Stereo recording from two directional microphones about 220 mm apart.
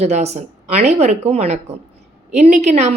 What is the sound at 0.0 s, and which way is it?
A woman's voice, 30° right (ahead or behind).